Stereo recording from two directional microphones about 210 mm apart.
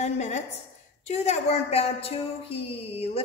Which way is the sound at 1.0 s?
30° left (ahead or behind).